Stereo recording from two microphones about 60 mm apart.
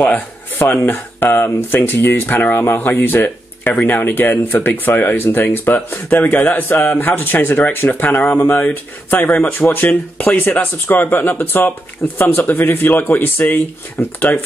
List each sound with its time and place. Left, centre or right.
0.0 s speech: left